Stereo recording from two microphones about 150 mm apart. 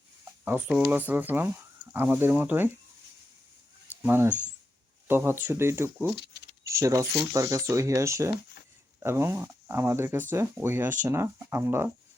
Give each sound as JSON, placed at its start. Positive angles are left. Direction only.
{"t": 0.4, "sound": "speech", "side_deg": -10}
{"t": 4.0, "sound": "speech", "side_deg": -15}